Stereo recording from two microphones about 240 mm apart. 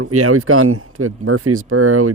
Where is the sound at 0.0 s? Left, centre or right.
Right.